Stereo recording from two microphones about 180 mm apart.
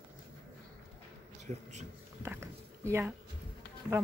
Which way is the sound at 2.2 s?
15° right (ahead or behind).